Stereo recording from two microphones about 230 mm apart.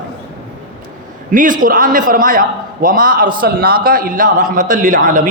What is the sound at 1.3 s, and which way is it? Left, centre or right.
A man's voice, right.